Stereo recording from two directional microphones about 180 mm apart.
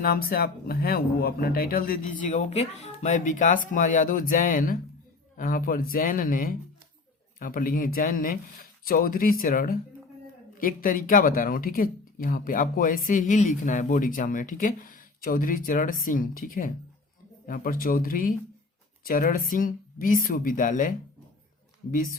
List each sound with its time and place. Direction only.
0.0 s speech: 55° left (ahead or behind)
21.9 s speech: 50° left (ahead or behind)